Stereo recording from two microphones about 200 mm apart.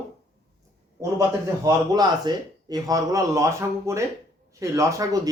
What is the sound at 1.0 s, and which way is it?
Speech, 15° right (ahead or behind).